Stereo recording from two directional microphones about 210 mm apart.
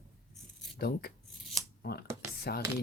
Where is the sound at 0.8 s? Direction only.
50° left (ahead or behind).